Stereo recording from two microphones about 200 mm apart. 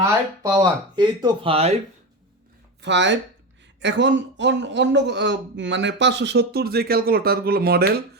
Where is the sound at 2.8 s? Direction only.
60° right (ahead or behind).